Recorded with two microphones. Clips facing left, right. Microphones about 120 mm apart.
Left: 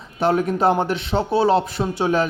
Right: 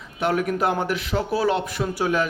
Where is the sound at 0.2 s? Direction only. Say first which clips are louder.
Left 4 dB; 30° left (ahead or behind).